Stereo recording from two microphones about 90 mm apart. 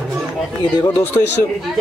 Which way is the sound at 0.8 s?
25° left (ahead or behind).